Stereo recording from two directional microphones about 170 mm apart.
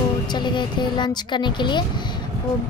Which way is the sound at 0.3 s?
25° left (ahead or behind).